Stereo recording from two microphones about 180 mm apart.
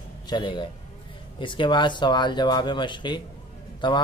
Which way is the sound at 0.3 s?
25° left (ahead or behind).